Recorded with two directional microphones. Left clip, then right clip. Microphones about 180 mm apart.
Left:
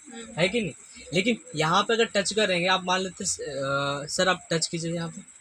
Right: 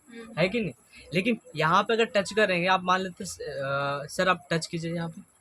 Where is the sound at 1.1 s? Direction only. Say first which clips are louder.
Left 2 dB; 30° left (ahead or behind).